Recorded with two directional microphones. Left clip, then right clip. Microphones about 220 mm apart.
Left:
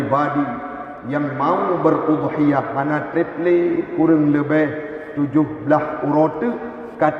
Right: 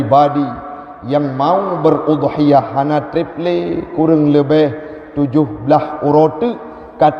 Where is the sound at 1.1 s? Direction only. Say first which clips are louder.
Right 6 dB; 45° right (ahead or behind).